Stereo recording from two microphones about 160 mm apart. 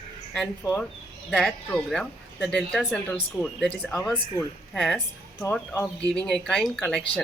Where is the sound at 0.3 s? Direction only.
5° left (ahead or behind).